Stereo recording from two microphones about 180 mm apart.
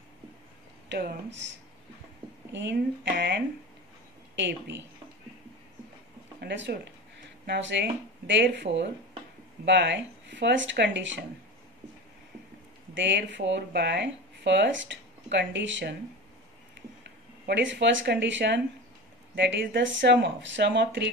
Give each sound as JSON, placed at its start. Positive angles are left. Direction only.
{"t": 0.8, "sound": "speech", "side_deg": -70}
{"t": 2.5, "sound": "speech", "side_deg": -70}
{"t": 4.4, "sound": "speech", "side_deg": -80}
{"t": 6.4, "sound": "speech", "side_deg": -70}
{"t": 12.9, "sound": "speech", "side_deg": -90}
{"t": 17.5, "sound": "speech", "side_deg": -75}